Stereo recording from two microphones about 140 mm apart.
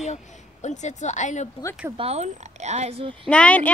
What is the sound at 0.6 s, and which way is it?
Speech, 55° left (ahead or behind).